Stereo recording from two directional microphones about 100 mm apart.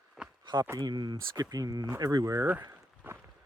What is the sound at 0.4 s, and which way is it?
Speech, 45° right (ahead or behind).